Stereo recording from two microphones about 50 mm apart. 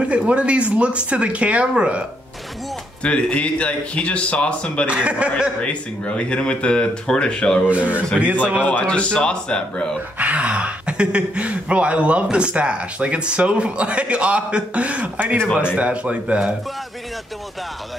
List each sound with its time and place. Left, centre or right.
0.0 s speech: right
3.0 s speech: left
4.8 s speech: right
5.6 s speech: left
7.7 s speech: right
8.8 s speech: centre
10.1 s speech: right